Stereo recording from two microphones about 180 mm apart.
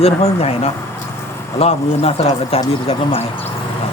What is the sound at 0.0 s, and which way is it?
Speech, 35° left (ahead or behind).